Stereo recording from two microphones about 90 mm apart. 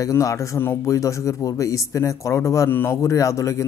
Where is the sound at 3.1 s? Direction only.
35° left (ahead or behind).